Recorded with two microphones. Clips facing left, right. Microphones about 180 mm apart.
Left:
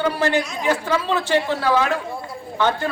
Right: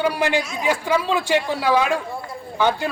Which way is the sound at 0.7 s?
10° right (ahead or behind).